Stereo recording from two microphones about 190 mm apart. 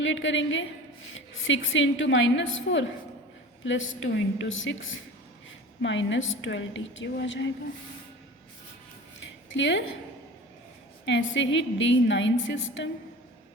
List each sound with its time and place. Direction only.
0.0 s a woman's voice: 80° left
5.8 s a woman's voice: 75° left (ahead or behind)
9.5 s a woman's voice: 75° left (ahead or behind)
11.0 s a woman's voice: 80° left